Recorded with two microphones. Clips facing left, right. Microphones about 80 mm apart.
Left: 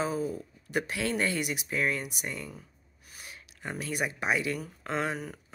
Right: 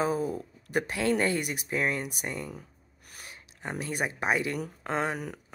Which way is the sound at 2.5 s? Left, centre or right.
Right.